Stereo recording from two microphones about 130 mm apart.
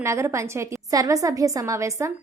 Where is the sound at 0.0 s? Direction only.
20° right (ahead or behind).